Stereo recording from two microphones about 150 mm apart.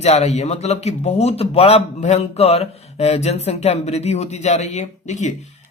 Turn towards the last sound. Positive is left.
turn(degrees=50)  # may be behind; listen again after turning